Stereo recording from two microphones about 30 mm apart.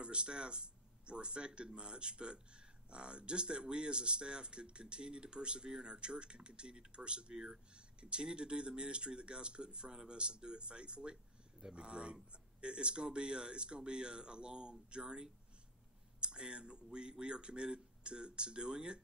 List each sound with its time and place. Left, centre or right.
0.0 s speech: right
7.3 s speech: right
7.7 s speech: right